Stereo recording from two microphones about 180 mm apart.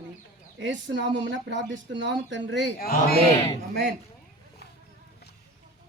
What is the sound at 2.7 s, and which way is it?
Speech, 55° left (ahead or behind).